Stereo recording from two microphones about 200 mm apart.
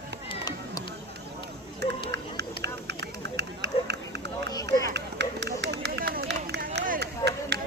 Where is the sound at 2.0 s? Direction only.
55° right (ahead or behind).